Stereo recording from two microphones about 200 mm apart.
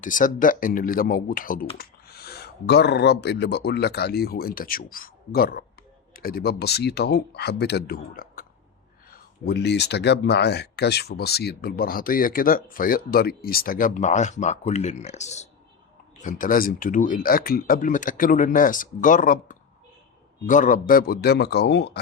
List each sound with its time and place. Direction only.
0.0 s speech: 40° left (ahead or behind)
9.5 s speech: 60° left (ahead or behind)